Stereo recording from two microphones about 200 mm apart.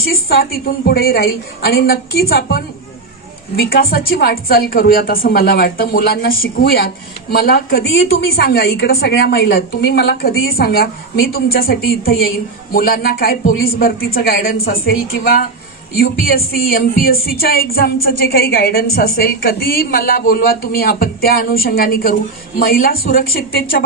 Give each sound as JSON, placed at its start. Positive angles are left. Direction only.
{"t": 0.0, "sound": "a woman's voice", "side_deg": 50}